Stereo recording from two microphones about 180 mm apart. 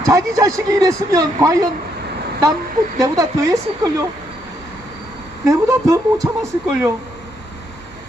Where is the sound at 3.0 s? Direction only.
20° right (ahead or behind).